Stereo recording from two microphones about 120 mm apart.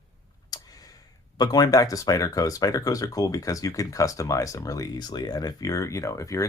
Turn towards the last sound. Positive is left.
turn(degrees=25)  # may be behind; listen again after turning